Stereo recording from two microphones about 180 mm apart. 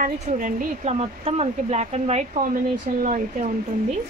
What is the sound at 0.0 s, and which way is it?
A woman's voice, 45° right (ahead or behind).